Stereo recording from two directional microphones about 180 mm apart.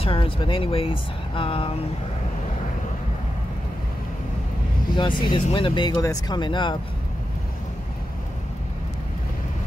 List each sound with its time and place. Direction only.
0.0 s speech: 30° left (ahead or behind)
4.9 s speech: 25° left (ahead or behind)